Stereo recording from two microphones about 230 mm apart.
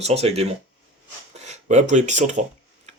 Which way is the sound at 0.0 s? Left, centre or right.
Right.